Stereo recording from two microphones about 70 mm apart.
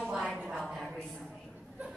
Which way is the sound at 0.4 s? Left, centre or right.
Centre.